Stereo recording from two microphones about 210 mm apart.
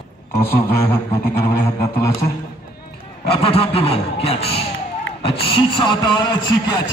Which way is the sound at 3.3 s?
25° left (ahead or behind).